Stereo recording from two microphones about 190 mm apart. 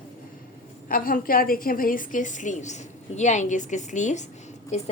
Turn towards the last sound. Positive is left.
turn(degrees=35)  # may be behind; listen again after turning